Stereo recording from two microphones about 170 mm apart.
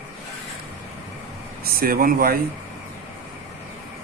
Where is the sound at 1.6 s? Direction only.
60° right (ahead or behind).